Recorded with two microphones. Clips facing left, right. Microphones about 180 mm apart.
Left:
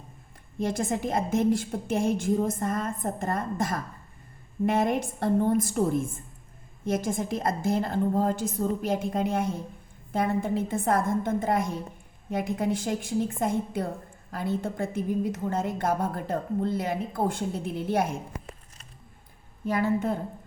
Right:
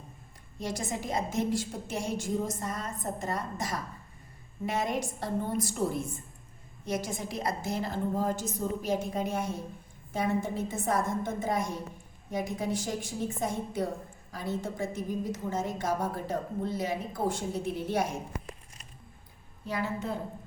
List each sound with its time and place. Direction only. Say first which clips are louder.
0.6 s a woman's voice: left 7 dB; 55° left (ahead or behind)
19.6 s a woman's voice: left 7 dB; 55° left (ahead or behind)